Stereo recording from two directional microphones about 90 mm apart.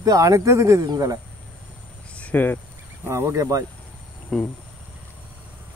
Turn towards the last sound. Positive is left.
turn(degrees=10)  # may be behind; listen again after turning